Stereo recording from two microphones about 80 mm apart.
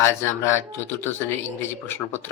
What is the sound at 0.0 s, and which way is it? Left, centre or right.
Speech, left.